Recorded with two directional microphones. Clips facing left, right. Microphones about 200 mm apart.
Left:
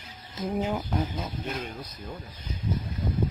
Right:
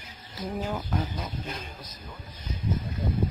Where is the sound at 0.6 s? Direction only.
20° left (ahead or behind).